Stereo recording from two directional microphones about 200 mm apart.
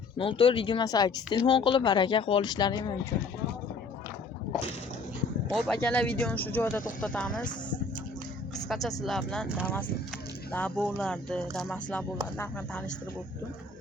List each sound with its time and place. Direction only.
0.2 s speech: 25° left (ahead or behind)
5.5 s speech: centre (ahead or behind)
8.5 s music: centre (ahead or behind)
9.0 s speech: 5° left (ahead or behind)